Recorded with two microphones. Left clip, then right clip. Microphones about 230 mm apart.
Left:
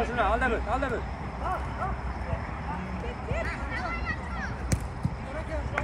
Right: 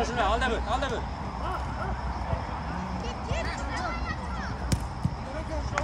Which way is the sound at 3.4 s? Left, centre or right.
Right.